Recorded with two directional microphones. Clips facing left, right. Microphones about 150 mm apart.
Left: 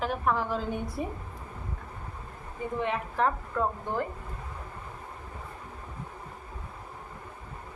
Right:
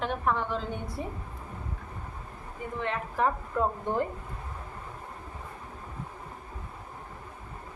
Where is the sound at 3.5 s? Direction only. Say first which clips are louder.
Right 2 dB; 20° right (ahead or behind).